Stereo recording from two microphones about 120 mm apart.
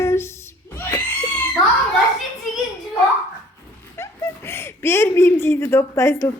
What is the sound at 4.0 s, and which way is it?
Speech, 20° left (ahead or behind).